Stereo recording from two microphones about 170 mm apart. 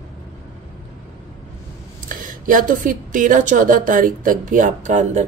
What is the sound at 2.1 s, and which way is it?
A woman's voice, 55° right (ahead or behind).